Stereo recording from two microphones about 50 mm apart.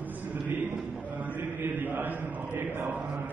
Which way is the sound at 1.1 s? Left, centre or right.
Right.